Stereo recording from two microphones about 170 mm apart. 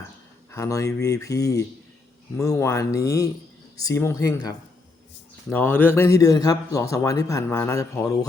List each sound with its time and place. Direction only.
0.5 s speech: 20° left (ahead or behind)
5.5 s speech: 10° left (ahead or behind)